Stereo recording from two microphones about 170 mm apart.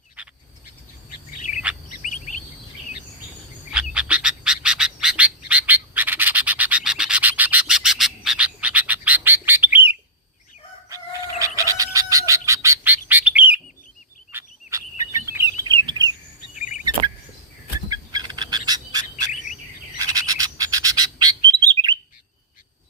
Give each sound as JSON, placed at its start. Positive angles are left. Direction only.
{"t": 0.2, "sound": "frog", "side_deg": -5}
{"t": 1.4, "sound": "bird", "side_deg": 45}
{"t": 1.6, "sound": "bird", "side_deg": -10}
{"t": 3.7, "sound": "bird", "side_deg": -5}
{"t": 10.8, "sound": "chicken", "side_deg": -20}
{"t": 14.3, "sound": "bird", "side_deg": -20}
{"t": 16.6, "sound": "a sound", "side_deg": 45}
{"t": 17.8, "sound": "a sound", "side_deg": -25}
{"t": 20.0, "sound": "bird", "side_deg": -20}